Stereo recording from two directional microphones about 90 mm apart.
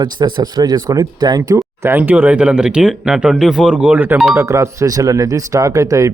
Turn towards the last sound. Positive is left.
turn(degrees=-35)  # may be behind; listen again after turning